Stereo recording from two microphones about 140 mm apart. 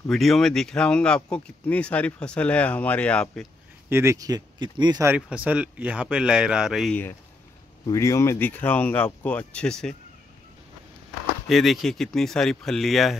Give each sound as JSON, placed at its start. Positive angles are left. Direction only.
{"t": 0.1, "sound": "speech", "side_deg": 0}
{"t": 3.9, "sound": "speech", "side_deg": -20}
{"t": 5.0, "sound": "speech", "side_deg": -10}
{"t": 7.8, "sound": "speech", "side_deg": 20}
{"t": 11.4, "sound": "speech", "side_deg": 0}